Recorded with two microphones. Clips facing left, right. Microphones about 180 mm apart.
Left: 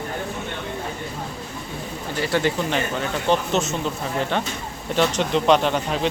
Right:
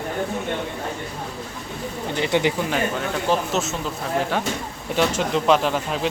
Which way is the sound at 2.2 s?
20° right (ahead or behind).